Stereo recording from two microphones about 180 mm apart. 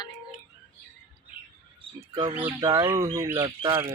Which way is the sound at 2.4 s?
15° right (ahead or behind).